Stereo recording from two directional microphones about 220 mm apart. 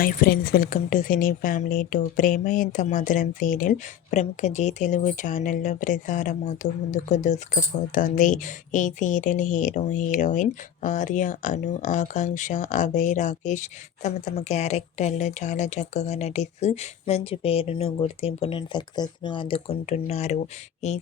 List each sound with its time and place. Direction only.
0.0 s speech: 40° left (ahead or behind)